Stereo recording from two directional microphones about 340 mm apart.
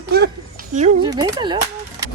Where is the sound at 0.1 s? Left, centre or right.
Right.